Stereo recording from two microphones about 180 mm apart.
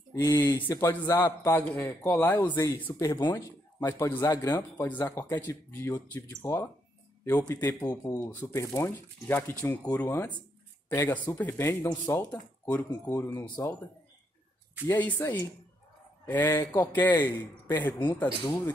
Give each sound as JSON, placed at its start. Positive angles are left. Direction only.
{"t": 0.1, "sound": "speech", "side_deg": 20}
{"t": 14.9, "sound": "speech", "side_deg": 10}